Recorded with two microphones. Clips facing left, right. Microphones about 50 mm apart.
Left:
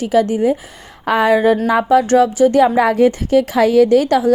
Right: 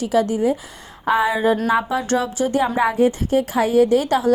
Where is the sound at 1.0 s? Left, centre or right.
Left.